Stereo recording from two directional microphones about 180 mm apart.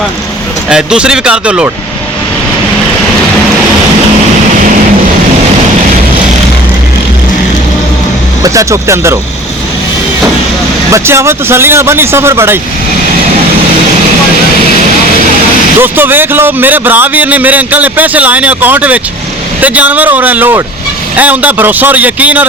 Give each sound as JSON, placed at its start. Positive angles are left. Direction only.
{"t": 0.7, "sound": "speech", "side_deg": -5}
{"t": 8.4, "sound": "speech", "side_deg": -15}
{"t": 10.9, "sound": "speech", "side_deg": -15}
{"t": 15.8, "sound": "speech", "side_deg": -10}